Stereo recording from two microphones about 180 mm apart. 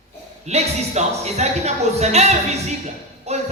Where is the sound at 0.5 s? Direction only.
40° right (ahead or behind).